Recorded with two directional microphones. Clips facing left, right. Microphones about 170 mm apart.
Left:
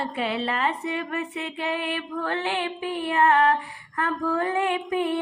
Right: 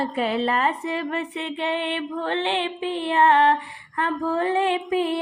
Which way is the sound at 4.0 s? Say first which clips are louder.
Right 2 dB; 30° right (ahead or behind).